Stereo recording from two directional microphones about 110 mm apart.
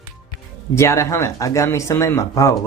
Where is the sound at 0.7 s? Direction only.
25° left (ahead or behind).